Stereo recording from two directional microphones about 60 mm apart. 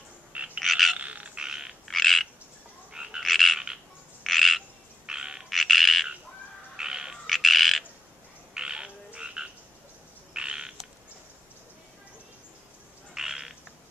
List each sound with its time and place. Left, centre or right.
0.6 s frog: centre
0.9 s frog: right
1.4 s frog: centre
1.9 s frog: centre
2.9 s frog: centre
3.2 s frog: centre
4.2 s squawk: centre
5.0 s frog: centre
5.5 s frog: centre
6.8 s bird: centre
7.2 s squawk: centre
8.5 s frog: centre
13.1 s frog: centre